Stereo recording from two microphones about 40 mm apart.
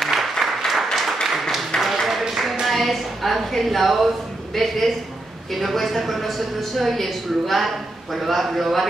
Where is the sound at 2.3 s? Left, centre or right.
Centre.